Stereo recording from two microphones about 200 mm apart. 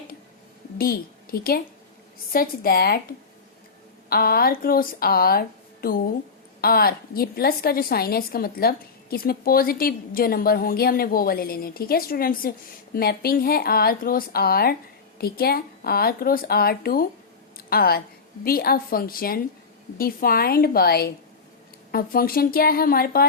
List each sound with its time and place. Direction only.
0.8 s a woman's voice: 50° left (ahead or behind)